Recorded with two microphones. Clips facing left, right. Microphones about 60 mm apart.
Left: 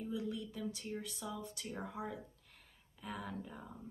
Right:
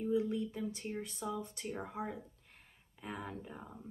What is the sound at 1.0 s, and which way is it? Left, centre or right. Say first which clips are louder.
A woman's voice: right 4 dB; right.